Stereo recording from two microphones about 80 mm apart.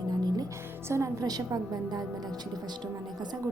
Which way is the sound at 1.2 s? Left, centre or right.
Right.